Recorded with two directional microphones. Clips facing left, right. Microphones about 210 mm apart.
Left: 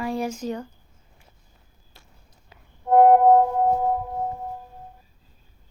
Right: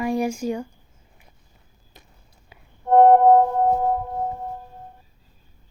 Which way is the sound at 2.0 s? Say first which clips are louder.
Right 4 dB; 20° right (ahead or behind).